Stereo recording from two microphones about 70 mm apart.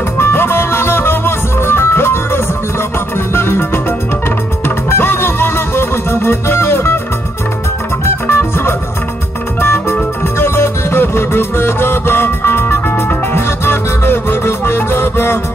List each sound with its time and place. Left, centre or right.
0.2 s music: left
8.0 s music: left